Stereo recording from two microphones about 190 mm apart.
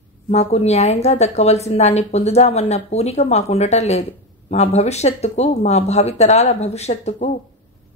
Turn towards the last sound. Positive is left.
turn(degrees=35)  # may be behind; listen again after turning